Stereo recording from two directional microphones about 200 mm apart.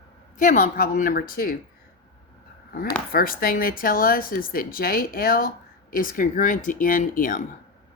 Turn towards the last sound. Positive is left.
turn(degrees=40)  # may be behind; listen again after turning